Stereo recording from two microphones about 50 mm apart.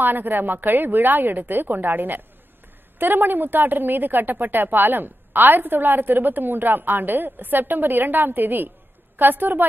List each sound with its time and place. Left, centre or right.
0.0 s a woman's voice: right